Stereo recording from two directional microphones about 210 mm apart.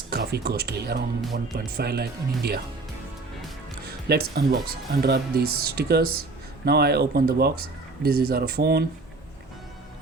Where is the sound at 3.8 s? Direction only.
50° right (ahead or behind).